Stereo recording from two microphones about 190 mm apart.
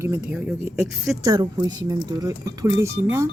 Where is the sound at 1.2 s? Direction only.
20° right (ahead or behind).